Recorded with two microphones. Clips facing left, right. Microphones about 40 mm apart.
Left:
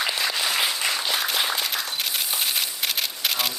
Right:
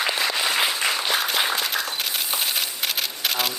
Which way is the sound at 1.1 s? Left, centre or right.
Centre.